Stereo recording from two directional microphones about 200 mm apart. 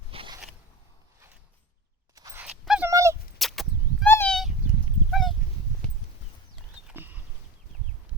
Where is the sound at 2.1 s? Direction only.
15° right (ahead or behind).